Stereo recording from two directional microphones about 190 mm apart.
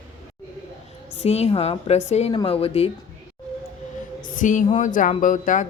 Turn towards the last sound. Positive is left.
turn(degrees=40)  # may be behind; listen again after turning